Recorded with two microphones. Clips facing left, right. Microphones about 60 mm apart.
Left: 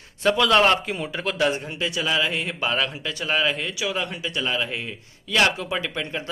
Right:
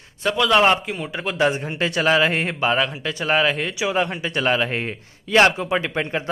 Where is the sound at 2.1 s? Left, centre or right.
Right.